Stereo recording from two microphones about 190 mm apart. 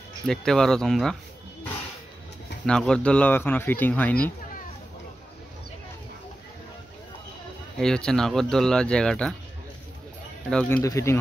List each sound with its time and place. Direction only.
0.3 s speech: centre (ahead or behind)
2.6 s speech: 5° left (ahead or behind)
7.7 s speech: 5° left (ahead or behind)
10.5 s speech: 5° left (ahead or behind)
10.8 s speech: 15° left (ahead or behind)